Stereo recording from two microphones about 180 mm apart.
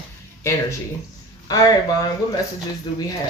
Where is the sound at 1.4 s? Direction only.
20° left (ahead or behind).